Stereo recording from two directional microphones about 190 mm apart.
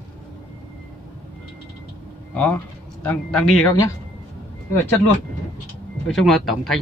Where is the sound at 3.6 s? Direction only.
15° left (ahead or behind).